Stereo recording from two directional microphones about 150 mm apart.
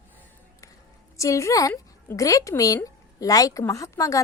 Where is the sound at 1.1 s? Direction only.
20° left (ahead or behind).